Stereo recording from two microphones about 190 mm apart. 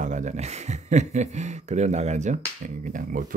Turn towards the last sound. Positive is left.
turn(degrees=-45)  # may be behind; listen again after turning